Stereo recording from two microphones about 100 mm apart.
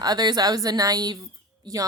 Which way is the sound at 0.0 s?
45° right (ahead or behind).